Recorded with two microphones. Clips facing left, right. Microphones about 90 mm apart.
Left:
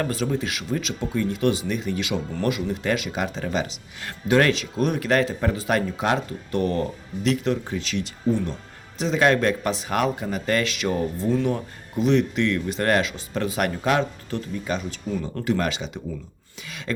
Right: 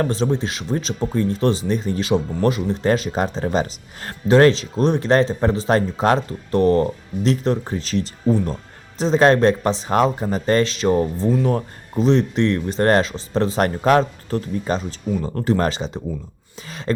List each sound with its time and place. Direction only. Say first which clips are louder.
0.0 s speech: right 4 dB; 30° right (ahead or behind)